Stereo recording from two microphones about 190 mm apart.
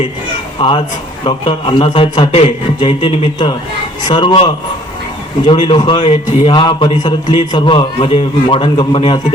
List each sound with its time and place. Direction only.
1.2 s a man's voice: 25° left (ahead or behind)
5.5 s a man's voice: 25° left (ahead or behind)